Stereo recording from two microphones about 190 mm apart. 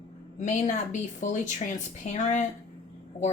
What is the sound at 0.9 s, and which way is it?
Speech, 40° left (ahead or behind).